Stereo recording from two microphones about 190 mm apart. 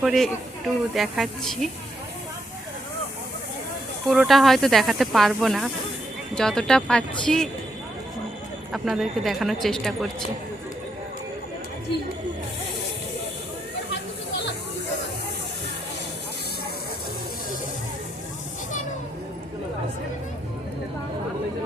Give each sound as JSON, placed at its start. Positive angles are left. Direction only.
{"t": 0.0, "sound": "speech", "side_deg": 0}
{"t": 4.1, "sound": "speech", "side_deg": 0}
{"t": 8.7, "sound": "speech", "side_deg": 0}
{"t": 13.9, "sound": "chatter", "side_deg": 65}